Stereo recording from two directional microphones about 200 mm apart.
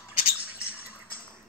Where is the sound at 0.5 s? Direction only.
50° left (ahead or behind).